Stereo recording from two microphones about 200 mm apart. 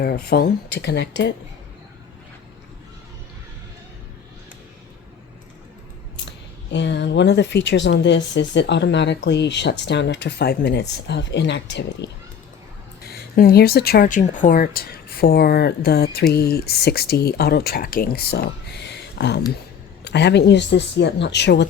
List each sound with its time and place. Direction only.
0.3 s speech: 50° left (ahead or behind)
6.7 s speech: 60° left (ahead or behind)